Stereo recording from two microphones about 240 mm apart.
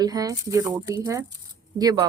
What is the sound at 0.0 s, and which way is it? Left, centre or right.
Speech, centre.